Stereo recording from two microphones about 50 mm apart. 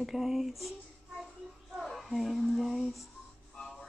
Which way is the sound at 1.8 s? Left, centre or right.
Centre.